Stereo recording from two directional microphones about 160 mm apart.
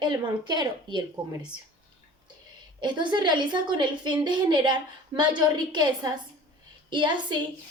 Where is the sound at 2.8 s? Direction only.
30° right (ahead or behind).